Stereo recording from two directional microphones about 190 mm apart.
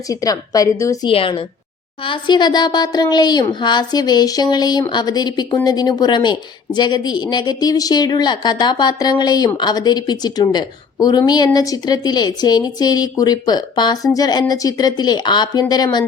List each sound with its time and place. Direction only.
0.1 s a woman's voice: 20° left (ahead or behind)
1.1 s a woman's voice: 30° left (ahead or behind)